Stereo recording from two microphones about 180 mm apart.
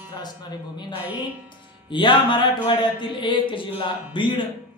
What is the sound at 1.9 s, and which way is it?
Speech, 25° left (ahead or behind).